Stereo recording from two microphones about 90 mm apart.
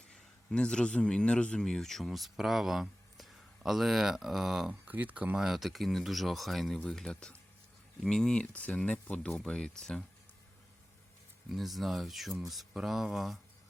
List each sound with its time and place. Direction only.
0.1 s a man's voice: 10° left (ahead or behind)
4.9 s speech: 20° right (ahead or behind)
5.4 s speech: centre (ahead or behind)
11.4 s speech: centre (ahead or behind)